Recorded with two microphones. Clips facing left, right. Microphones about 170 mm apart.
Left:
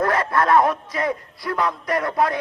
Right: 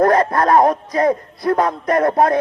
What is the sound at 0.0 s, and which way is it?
A man's voice, 40° right (ahead or behind).